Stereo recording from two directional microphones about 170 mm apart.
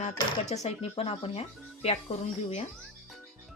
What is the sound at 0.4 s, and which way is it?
Speech, 40° left (ahead or behind).